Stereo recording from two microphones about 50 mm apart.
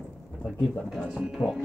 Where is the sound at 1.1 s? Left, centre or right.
Centre.